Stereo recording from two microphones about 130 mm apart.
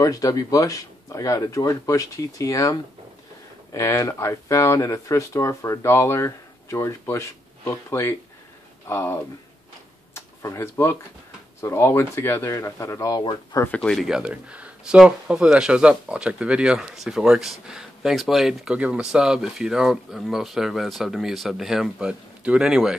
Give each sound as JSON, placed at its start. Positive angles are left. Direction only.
{"t": 0.0, "sound": "speech", "side_deg": 25}
{"t": 13.6, "sound": "speech", "side_deg": 10}
{"t": 14.0, "sound": "speech", "side_deg": -5}